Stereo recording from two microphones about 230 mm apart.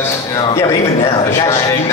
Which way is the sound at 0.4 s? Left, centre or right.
Centre.